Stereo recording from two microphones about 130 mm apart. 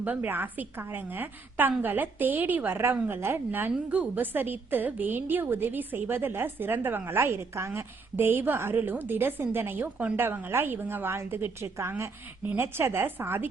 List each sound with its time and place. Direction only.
0.0 s a woman's voice: 15° right (ahead or behind)